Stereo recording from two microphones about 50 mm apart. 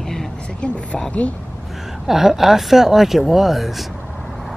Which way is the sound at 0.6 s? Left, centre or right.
Left.